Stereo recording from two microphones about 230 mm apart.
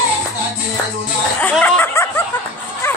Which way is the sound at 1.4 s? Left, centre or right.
Centre.